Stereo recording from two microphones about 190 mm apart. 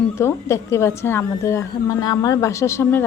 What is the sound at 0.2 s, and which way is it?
Speech, 15° left (ahead or behind).